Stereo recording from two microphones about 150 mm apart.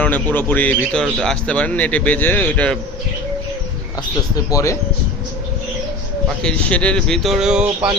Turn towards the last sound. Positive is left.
turn(degrees=-5)  # may be behind; listen again after turning